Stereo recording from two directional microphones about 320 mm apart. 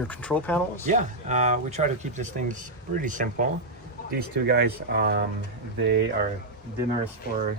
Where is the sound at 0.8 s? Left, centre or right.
Right.